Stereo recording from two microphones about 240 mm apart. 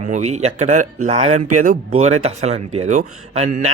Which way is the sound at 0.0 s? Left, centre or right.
Right.